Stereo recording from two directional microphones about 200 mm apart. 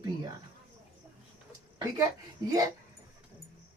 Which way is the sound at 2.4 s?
20° right (ahead or behind).